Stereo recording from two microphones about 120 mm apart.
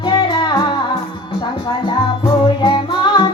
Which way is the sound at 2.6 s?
40° left (ahead or behind).